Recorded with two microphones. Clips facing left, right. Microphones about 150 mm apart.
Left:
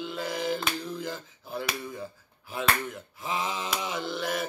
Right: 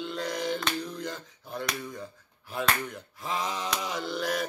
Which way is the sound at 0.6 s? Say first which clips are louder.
Even; 5° left (ahead or behind).